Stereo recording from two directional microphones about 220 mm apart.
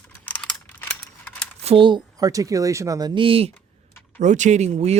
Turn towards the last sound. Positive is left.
turn(degrees=-30)  # may be behind; listen again after turning